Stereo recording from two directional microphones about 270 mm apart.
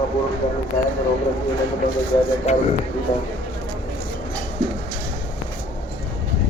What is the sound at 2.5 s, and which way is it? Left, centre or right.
Speech, left.